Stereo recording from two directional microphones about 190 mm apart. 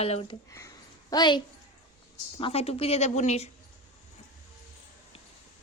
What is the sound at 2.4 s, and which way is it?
Speech, 30° left (ahead or behind).